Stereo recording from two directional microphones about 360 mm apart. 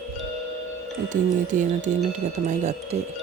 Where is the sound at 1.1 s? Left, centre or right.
Right.